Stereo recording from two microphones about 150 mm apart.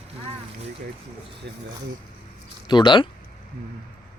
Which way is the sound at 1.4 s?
90° right.